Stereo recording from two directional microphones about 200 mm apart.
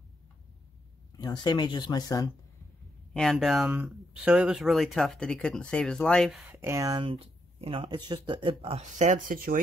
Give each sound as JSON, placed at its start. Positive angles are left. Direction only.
{"t": 1.1, "sound": "speech", "side_deg": 20}
{"t": 3.1, "sound": "speech", "side_deg": 0}
{"t": 6.5, "sound": "speech", "side_deg": -15}